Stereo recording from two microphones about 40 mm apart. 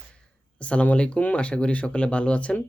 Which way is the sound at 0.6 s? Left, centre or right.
Left.